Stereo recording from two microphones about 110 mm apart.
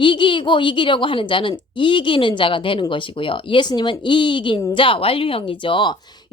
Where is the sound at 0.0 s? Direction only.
50° left (ahead or behind).